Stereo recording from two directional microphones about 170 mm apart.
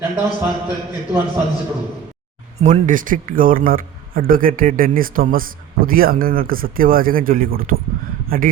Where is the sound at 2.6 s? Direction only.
50° right (ahead or behind).